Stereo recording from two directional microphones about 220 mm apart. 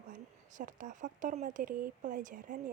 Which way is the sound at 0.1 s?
35° right (ahead or behind).